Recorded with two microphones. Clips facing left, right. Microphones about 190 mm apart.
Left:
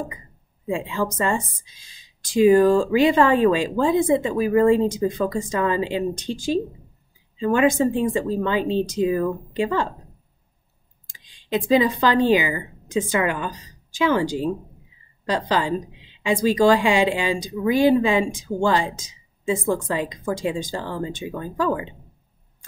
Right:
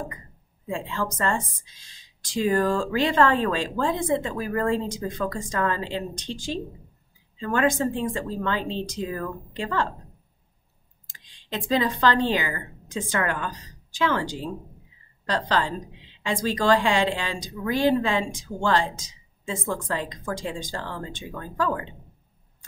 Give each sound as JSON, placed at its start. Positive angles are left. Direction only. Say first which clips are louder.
{"t": 0.7, "sound": "a woman's voice", "louder": "left 5 dB", "side_deg": 10}
{"t": 11.1, "sound": "a woman's voice", "louder": "left 8 dB", "side_deg": 10}